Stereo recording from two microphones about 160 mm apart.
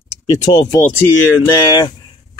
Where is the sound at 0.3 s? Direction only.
25° left (ahead or behind).